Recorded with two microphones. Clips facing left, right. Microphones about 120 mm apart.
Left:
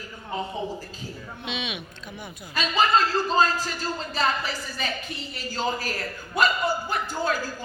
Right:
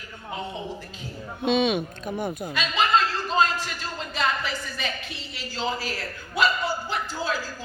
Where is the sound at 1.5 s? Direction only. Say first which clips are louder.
Right 12 dB; 45° right (ahead or behind).